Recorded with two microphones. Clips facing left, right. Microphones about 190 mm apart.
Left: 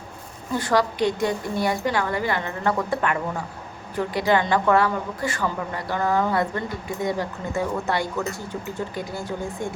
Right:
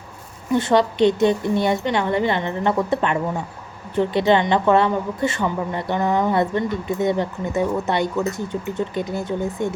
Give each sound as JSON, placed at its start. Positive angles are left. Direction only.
{"t": 0.5, "sound": "a woman's voice", "side_deg": -25}